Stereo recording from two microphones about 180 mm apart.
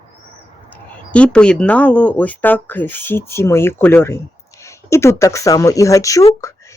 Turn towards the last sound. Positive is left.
turn(degrees=15)  # may be behind; listen again after turning